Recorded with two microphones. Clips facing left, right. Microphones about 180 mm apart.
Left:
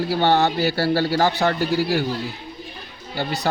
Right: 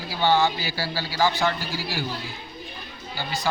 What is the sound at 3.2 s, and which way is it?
Speech, 65° left (ahead or behind).